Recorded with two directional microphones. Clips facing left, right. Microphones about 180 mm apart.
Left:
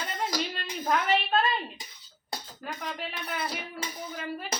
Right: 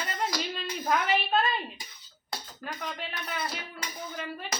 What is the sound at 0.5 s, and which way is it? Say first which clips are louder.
Speech: even; centre (ahead or behind).